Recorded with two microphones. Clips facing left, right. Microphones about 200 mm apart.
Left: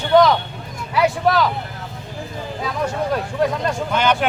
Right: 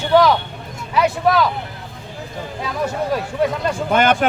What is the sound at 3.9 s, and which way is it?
Speech, 50° right (ahead or behind).